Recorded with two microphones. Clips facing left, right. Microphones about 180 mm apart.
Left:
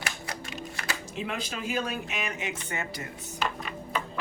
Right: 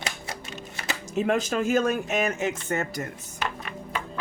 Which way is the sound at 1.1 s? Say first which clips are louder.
Right 13 dB; 45° right (ahead or behind).